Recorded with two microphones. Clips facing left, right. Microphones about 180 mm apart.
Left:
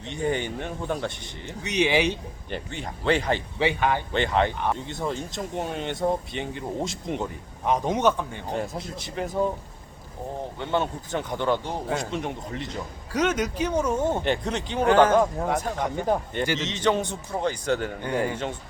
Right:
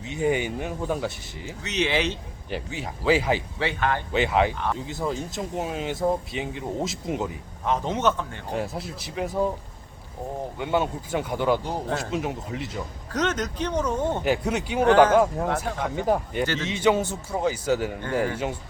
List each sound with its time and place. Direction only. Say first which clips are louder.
0.0 s speech: right 2 dB; 5° right (ahead or behind)
1.6 s speech: left 3 dB; 15° left (ahead or behind)
2.5 s speech: right 2 dB; 5° right (ahead or behind)
3.6 s speech: left 2 dB; 15° left (ahead or behind)
4.1 s speech: right 1 dB; 5° right (ahead or behind)
4.5 s speech: left 1 dB; 15° left (ahead or behind)
4.9 s speech: right 1 dB; centre (ahead or behind)
7.6 s speech: left 2 dB; 15° left (ahead or behind)
8.5 s speech: right 1 dB; 5° right (ahead or behind)
10.6 s a man's voice: right 2 dB; 10° right (ahead or behind)
13.1 s speech: left 2 dB; 10° left (ahead or behind)
14.3 s a man's voice: right 2 dB; 10° right (ahead or behind)